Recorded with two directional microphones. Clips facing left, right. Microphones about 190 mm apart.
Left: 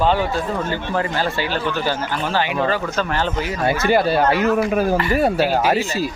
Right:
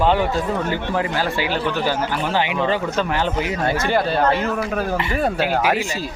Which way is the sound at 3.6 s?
10° left (ahead or behind).